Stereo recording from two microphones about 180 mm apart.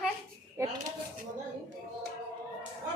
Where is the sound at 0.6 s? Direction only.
15° right (ahead or behind).